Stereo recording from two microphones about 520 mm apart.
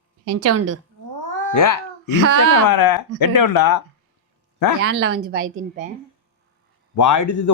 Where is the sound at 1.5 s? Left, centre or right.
Left.